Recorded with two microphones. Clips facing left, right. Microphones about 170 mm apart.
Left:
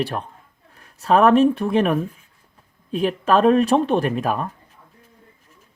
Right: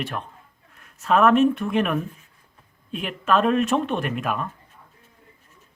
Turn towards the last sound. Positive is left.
turn(degrees=35)  # may be behind; listen again after turning